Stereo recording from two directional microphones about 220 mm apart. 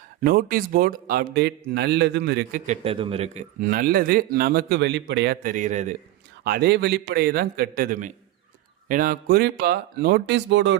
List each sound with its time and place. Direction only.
0.2 s speech: 40° right (ahead or behind)
2.6 s a man's voice: 25° right (ahead or behind)
3.6 s speech: 40° right (ahead or behind)
6.4 s speech: 45° right (ahead or behind)